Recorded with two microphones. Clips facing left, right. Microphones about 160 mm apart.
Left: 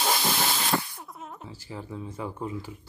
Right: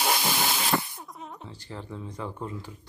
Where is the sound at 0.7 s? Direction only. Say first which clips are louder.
Right 1 dB; 20° right (ahead or behind).